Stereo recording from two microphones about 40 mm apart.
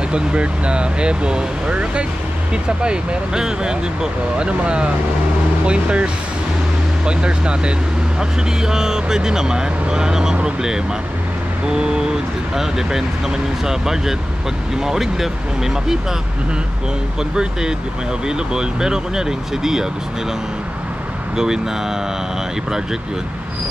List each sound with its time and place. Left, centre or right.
0.1 s speech: right
7.1 s speech: right
11.6 s speech: centre
17.2 s speech: centre